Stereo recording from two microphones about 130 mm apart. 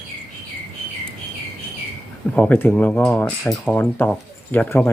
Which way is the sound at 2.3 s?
15° left (ahead or behind).